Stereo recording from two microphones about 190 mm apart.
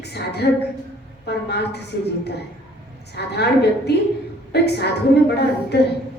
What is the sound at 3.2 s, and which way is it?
Speech, 60° left (ahead or behind).